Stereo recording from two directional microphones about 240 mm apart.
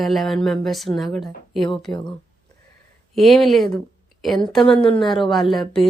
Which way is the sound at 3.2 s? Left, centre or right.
Centre.